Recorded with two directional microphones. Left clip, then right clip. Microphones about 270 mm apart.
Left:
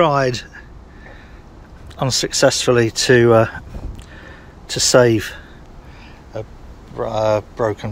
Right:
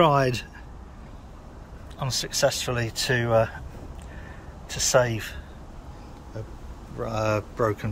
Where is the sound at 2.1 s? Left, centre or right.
Centre.